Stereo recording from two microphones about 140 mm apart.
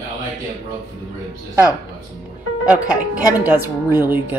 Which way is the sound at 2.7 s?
10° right (ahead or behind).